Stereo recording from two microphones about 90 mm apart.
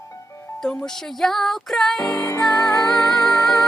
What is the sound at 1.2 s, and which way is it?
Female singing, 5° left (ahead or behind).